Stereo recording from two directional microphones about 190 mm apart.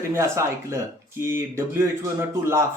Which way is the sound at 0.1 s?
15° right (ahead or behind).